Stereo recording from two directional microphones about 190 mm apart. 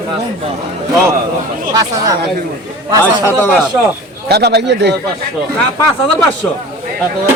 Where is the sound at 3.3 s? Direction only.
10° left (ahead or behind).